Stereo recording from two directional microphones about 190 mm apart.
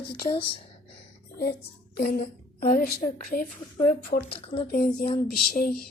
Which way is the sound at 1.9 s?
55° left (ahead or behind).